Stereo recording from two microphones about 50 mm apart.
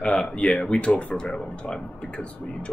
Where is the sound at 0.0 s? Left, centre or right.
Left.